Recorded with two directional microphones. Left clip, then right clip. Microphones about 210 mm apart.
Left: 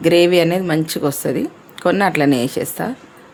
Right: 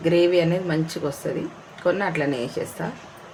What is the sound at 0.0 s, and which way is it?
Speech, 45° left (ahead or behind).